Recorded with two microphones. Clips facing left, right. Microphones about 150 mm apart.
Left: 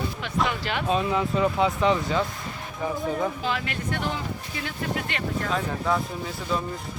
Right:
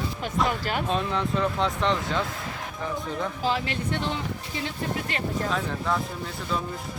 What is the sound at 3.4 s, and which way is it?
Speech, 30° right (ahead or behind).